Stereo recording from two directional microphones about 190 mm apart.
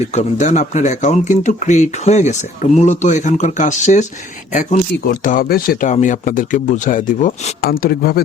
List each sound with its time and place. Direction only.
0.1 s speech: 40° left (ahead or behind)
5.2 s speech: 45° left (ahead or behind)
7.6 s speech: 50° left (ahead or behind)